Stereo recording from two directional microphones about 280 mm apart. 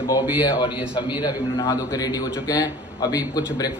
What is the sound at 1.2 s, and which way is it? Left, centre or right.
A man's voice, centre.